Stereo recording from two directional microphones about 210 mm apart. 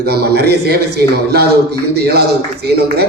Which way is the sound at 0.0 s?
50° right (ahead or behind).